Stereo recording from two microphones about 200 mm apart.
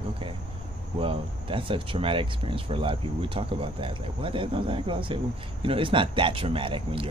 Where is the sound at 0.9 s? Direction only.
25° right (ahead or behind).